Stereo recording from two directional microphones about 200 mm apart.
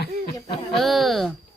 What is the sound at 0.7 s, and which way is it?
Speech, centre (ahead or behind).